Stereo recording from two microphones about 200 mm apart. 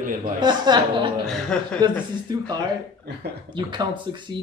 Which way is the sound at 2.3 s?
20° right (ahead or behind).